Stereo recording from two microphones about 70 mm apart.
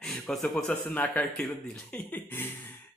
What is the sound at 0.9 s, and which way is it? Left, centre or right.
Speech, left.